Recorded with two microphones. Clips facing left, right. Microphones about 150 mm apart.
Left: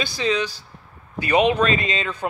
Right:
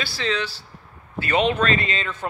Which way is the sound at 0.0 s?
15° left (ahead or behind).